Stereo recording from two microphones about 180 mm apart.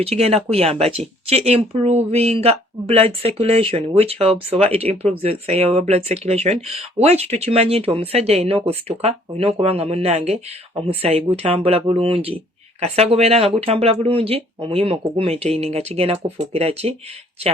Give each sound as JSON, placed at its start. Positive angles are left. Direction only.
{"t": 0.0, "sound": "speech", "side_deg": -35}